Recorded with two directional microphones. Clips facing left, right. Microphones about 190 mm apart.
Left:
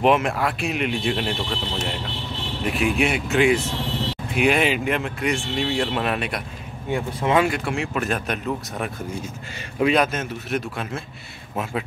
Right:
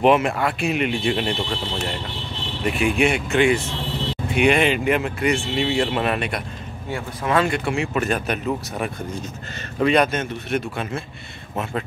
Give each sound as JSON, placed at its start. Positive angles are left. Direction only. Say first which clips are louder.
{"t": 0.0, "sound": "speech", "louder": "right 2 dB", "side_deg": 0}
{"t": 2.6, "sound": "speech", "louder": "right 2 dB", "side_deg": 0}
{"t": 6.9, "sound": "speech", "louder": "left 2 dB", "side_deg": 20}
{"t": 7.4, "sound": "speech", "louder": "right 1 dB", "side_deg": 0}